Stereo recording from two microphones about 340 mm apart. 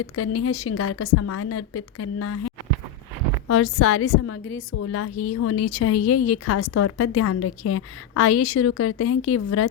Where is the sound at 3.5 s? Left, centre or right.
Left.